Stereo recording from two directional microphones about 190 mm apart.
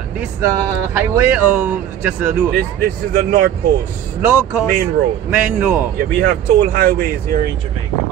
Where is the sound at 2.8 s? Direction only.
50° right (ahead or behind).